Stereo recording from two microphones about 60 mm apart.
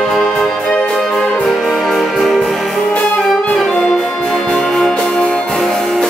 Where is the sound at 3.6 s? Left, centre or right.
Centre.